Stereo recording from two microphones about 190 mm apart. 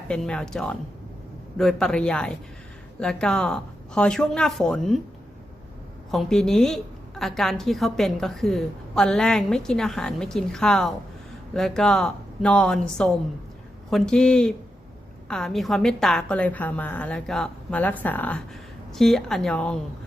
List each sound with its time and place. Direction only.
0.1 s a woman's voice: 5° left (ahead or behind)
6.1 s a woman's voice: centre (ahead or behind)